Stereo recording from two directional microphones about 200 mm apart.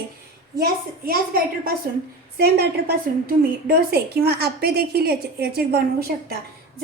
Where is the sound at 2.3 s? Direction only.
50° right (ahead or behind).